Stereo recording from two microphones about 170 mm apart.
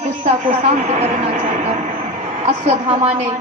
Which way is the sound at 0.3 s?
45° right (ahead or behind).